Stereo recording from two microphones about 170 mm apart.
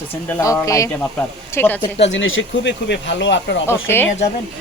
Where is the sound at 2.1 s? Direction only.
90° left.